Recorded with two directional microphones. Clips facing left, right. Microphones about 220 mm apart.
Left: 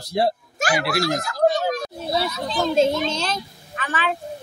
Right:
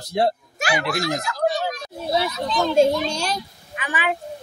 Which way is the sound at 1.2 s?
50° left (ahead or behind).